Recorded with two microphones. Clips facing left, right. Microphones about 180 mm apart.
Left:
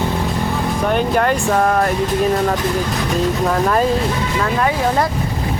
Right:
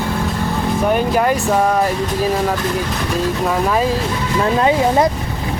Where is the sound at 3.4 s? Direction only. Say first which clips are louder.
Even; centre (ahead or behind).